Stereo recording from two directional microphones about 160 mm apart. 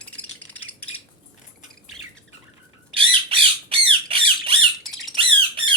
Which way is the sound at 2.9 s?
35° right (ahead or behind).